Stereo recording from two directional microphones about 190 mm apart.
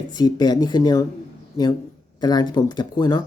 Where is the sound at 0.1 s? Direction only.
20° left (ahead or behind).